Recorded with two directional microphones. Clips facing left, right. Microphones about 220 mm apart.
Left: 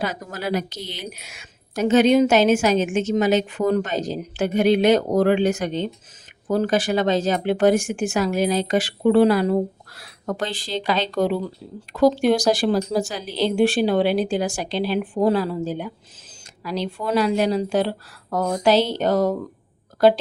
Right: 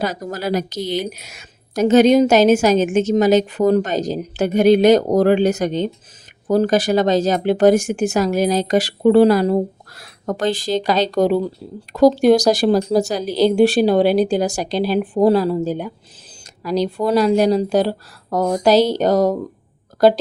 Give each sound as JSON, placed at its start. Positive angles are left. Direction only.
{"t": 0.0, "sound": "speech", "side_deg": -40}